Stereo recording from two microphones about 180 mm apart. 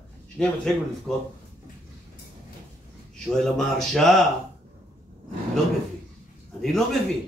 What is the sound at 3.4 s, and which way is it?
Speech, centre (ahead or behind).